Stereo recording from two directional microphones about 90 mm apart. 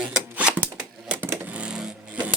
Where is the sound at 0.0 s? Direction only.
15° right (ahead or behind).